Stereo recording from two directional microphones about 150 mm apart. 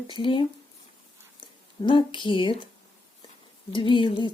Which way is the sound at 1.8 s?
35° left (ahead or behind).